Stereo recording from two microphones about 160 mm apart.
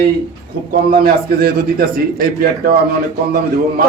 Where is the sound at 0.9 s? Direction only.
70° right (ahead or behind).